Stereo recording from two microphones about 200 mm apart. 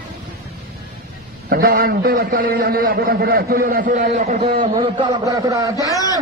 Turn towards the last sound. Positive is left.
turn(degrees=-15)  # may be behind; listen again after turning